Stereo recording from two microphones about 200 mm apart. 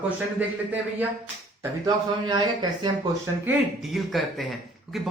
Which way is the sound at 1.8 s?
20° right (ahead or behind).